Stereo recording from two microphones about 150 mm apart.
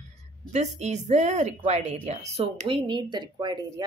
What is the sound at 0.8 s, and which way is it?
A woman's voice, 50° right (ahead or behind).